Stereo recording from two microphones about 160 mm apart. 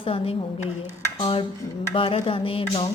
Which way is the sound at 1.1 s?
30° left (ahead or behind).